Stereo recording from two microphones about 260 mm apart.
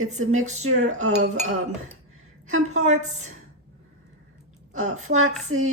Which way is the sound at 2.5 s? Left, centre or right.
Right.